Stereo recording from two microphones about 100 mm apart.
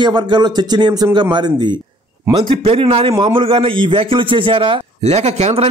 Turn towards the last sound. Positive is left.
turn(degrees=-90)